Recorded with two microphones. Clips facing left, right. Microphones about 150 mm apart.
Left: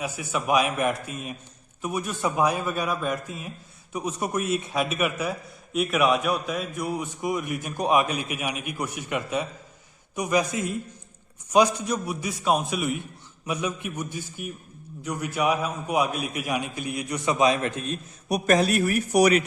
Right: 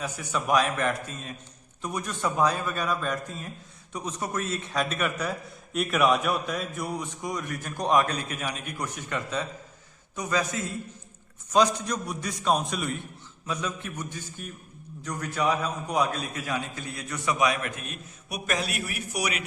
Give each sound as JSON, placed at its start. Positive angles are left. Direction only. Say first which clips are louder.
{"t": 0.0, "sound": "a man's voice", "louder": "left 2 dB", "side_deg": 10}